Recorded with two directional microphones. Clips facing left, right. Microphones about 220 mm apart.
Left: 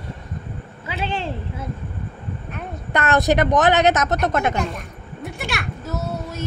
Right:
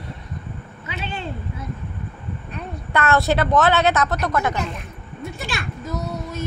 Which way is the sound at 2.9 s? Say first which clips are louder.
Left 1 dB; 20° left (ahead or behind).